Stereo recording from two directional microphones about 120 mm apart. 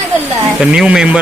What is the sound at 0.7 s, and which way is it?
Speech, 5° right (ahead or behind).